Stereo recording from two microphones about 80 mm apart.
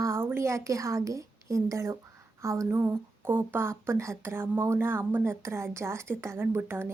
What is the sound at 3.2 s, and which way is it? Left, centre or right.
A woman's voice, right.